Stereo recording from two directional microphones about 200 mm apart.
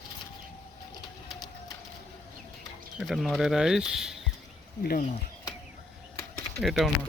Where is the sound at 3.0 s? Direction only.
Centre (ahead or behind).